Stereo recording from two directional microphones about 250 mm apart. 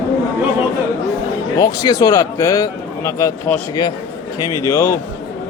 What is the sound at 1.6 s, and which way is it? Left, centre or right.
A man's voice, centre.